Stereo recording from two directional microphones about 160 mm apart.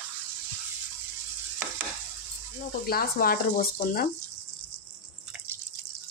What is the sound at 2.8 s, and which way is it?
Speech, 70° left (ahead or behind).